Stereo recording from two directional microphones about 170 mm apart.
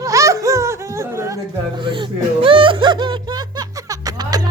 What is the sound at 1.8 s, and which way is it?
Music, 30° right (ahead or behind).